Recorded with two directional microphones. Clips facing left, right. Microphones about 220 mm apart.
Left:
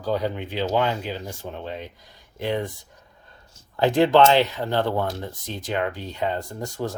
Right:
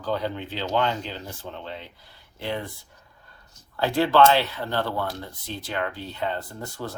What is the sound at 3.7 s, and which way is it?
Speech, 20° left (ahead or behind).